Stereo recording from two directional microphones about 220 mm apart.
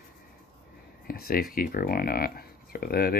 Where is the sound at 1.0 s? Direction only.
45° left (ahead or behind).